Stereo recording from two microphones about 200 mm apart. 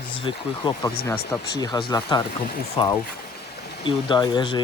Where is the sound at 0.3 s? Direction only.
20° left (ahead or behind).